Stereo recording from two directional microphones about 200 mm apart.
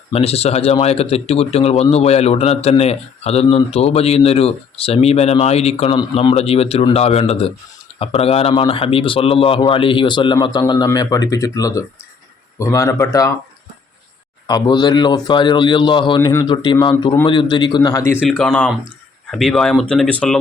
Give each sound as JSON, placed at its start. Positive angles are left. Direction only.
{"t": 0.1, "sound": "a man's voice", "side_deg": 30}
{"t": 14.4, "sound": "a man's voice", "side_deg": 20}
{"t": 18.3, "sound": "speech", "side_deg": 5}